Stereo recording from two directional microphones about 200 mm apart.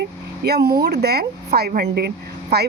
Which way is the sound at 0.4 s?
50° right (ahead or behind).